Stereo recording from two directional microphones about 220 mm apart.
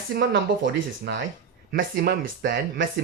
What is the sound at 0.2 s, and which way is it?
Speech, 50° right (ahead or behind).